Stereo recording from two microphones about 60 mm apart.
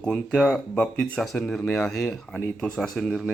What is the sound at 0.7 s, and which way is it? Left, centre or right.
Speech, centre.